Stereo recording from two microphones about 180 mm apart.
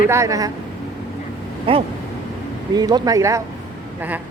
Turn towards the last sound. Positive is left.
turn(degrees=-20)  # may be behind; listen again after turning